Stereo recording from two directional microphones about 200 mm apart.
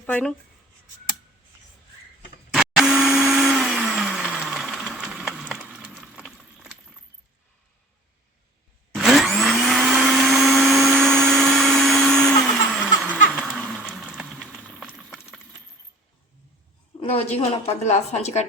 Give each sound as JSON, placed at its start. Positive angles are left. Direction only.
{"t": 0.0, "sound": "speech", "side_deg": 5}
{"t": 2.5, "sound": "blender", "side_deg": 0}
{"t": 9.0, "sound": "blender", "side_deg": 0}
{"t": 13.3, "sound": "a sound", "side_deg": -5}
{"t": 17.0, "sound": "a sound", "side_deg": 30}
{"t": 17.3, "sound": "a woman's voice", "side_deg": 30}